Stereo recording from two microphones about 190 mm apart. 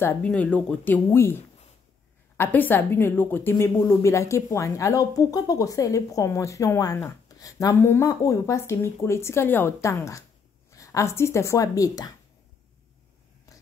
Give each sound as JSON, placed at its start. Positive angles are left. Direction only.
{"t": 0.0, "sound": "a woman's voice", "side_deg": 5}